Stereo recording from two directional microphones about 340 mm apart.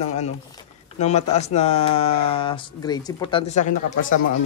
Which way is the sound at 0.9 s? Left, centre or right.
Centre.